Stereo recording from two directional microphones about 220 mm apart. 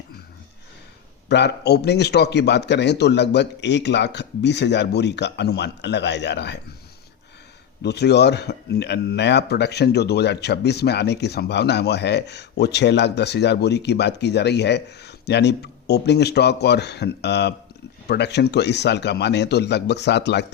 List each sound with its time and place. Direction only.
1.3 s a man's voice: 50° left (ahead or behind)
7.8 s a man's voice: 50° left (ahead or behind)